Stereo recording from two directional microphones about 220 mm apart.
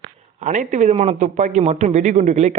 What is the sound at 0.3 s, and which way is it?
A man's voice, 35° right (ahead or behind).